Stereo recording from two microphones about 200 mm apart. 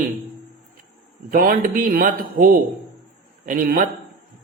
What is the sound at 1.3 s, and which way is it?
Speech, 45° right (ahead or behind).